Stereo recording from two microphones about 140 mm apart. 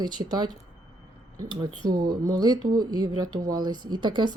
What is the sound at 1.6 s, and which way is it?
Speech, 30° right (ahead or behind).